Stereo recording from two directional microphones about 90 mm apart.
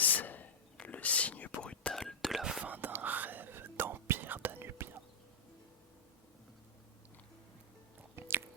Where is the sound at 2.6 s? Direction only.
20° right (ahead or behind).